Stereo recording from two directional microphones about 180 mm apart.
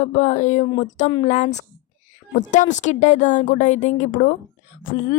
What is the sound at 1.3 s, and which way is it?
Speech, 40° left (ahead or behind).